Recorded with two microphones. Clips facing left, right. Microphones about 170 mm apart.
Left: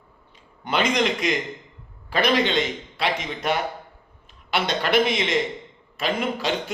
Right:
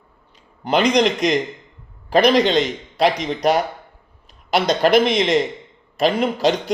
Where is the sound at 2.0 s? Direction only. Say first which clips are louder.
Right 7 dB; 40° right (ahead or behind).